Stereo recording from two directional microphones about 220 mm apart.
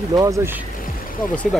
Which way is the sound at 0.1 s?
15° right (ahead or behind).